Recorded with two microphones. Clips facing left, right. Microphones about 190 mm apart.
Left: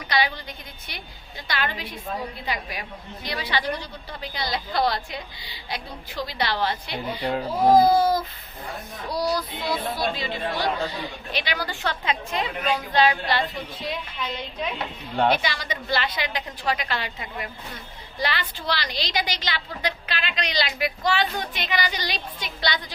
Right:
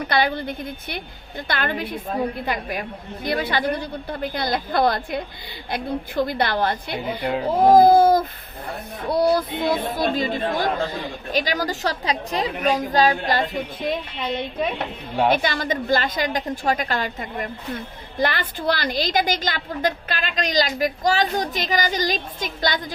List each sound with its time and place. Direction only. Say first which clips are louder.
0.0 s a woman's voice: right 4 dB; 50° right (ahead or behind)